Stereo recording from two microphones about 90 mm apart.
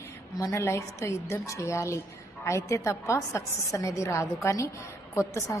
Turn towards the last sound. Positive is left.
turn(degrees=30)  # may be behind; listen again after turning